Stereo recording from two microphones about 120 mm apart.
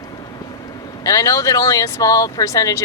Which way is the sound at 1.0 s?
30° left (ahead or behind).